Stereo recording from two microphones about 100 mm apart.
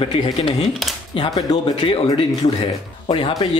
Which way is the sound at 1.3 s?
40° left (ahead or behind).